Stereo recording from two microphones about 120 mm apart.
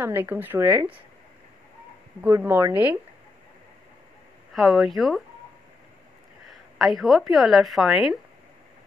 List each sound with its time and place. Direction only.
0.0 s speech: 20° right (ahead or behind)
2.2 s speech: 20° right (ahead or behind)
4.6 s a woman's voice: centre (ahead or behind)
6.8 s a woman's voice: centre (ahead or behind)